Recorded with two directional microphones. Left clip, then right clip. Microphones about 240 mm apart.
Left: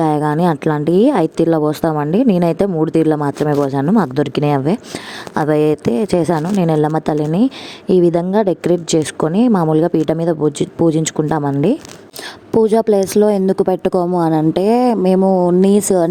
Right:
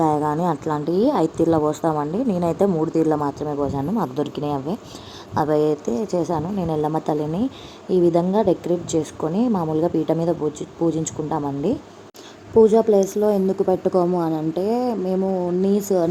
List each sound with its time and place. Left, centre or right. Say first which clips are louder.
0.0 s a woman's voice: left 5 dB; left
5.5 s speech: left 6 dB; left
5.8 s a woman's voice: left 7 dB; left